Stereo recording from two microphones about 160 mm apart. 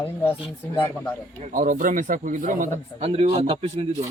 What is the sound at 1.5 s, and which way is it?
Speech, 55° right (ahead or behind).